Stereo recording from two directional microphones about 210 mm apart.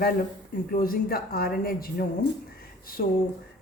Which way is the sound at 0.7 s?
45° left (ahead or behind).